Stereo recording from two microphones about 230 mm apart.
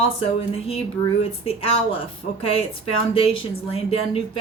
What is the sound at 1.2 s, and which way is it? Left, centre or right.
Speech, left.